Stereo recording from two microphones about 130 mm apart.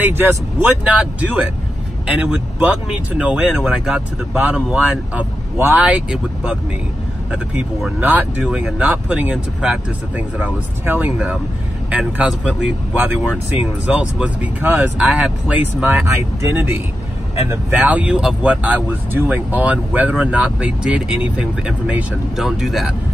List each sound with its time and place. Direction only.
0.0 s speech: 15° right (ahead or behind)